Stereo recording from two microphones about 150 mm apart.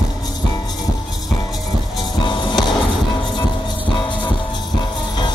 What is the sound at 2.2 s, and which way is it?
Music, 30° left (ahead or behind).